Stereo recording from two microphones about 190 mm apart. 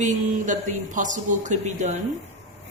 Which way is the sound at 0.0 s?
40° right (ahead or behind).